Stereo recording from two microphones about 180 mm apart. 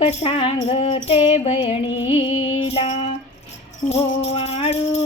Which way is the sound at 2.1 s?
90° left.